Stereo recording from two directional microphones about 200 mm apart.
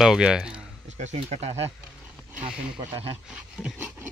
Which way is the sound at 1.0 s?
35° right (ahead or behind).